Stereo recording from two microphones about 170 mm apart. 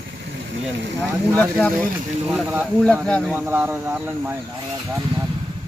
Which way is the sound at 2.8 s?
5° left (ahead or behind).